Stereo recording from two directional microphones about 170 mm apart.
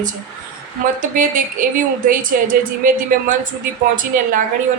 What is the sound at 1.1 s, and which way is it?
A woman's voice, 50° right (ahead or behind).